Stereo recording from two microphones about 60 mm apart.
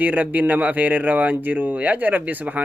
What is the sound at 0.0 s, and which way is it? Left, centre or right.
A man's voice, right.